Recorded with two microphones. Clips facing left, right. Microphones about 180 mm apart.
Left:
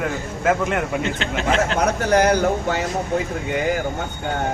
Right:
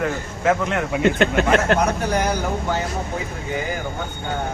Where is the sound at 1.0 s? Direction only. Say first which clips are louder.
Right 5 dB; 55° right (ahead or behind).